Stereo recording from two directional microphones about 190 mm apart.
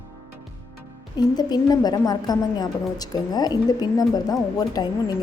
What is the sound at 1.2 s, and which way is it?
A woman's voice, 20° left (ahead or behind).